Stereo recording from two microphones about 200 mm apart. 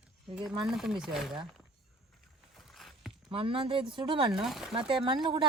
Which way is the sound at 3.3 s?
25° right (ahead or behind).